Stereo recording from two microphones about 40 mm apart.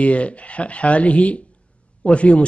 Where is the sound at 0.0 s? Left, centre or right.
Left.